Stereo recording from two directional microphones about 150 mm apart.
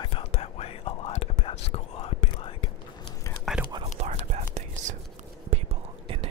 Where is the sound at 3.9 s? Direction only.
50° right (ahead or behind).